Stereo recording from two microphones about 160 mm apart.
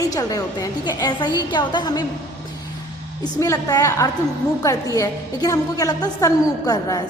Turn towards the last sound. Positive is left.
turn(degrees=20)  # may be behind; listen again after turning